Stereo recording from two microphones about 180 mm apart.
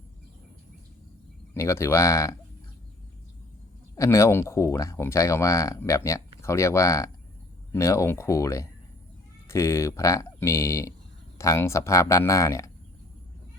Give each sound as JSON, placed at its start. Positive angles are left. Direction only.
{"t": 1.5, "sound": "speech", "side_deg": 15}
{"t": 3.9, "sound": "speech", "side_deg": 15}